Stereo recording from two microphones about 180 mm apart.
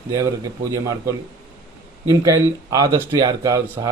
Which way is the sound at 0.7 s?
20° right (ahead or behind).